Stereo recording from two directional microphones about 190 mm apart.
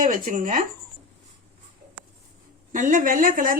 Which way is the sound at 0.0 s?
45° right (ahead or behind).